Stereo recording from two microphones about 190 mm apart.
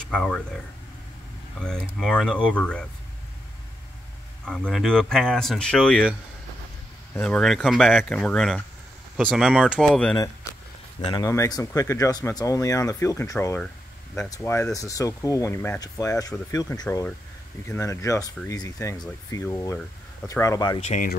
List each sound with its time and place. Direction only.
0.1 s speech: 5° left (ahead or behind)
1.6 s speech: 5° left (ahead or behind)
4.5 s speech: 5° left (ahead or behind)
7.2 s speech: 5° left (ahead or behind)
11.1 s speech: 20° left (ahead or behind)
20.8 s speech: 40° left (ahead or behind)